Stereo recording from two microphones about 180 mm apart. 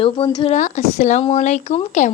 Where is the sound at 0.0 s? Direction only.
25° left (ahead or behind).